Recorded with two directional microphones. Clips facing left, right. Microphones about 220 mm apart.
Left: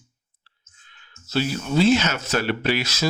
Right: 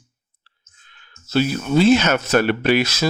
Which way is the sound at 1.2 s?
55° right (ahead or behind).